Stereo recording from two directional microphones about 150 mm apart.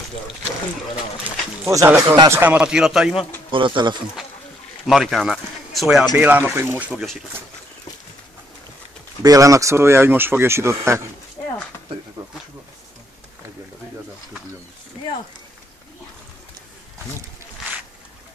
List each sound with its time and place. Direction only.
1.3 s speech: 10° right (ahead or behind)
1.7 s speech: 20° right (ahead or behind); by 3.3 s centre (ahead or behind)
3.5 s speech: 35° right (ahead or behind)
4.8 s speech: centre (ahead or behind)
6.1 s speech: 10° right (ahead or behind)
9.2 s speech: 25° right (ahead or behind)